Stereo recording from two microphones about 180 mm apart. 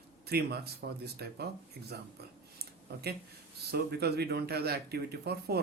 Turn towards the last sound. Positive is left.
turn(degrees=-60)  # may be behind; listen again after turning